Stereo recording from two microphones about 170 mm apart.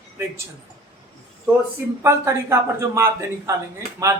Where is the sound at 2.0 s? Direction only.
15° right (ahead or behind).